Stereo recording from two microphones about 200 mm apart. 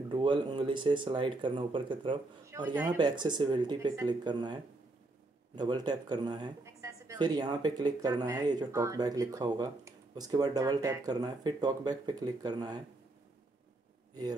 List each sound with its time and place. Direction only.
0.1 s a woman's voice: 25° right (ahead or behind)
2.4 s a woman's voice: 15° right (ahead or behind)
5.6 s a woman's voice: 20° right (ahead or behind)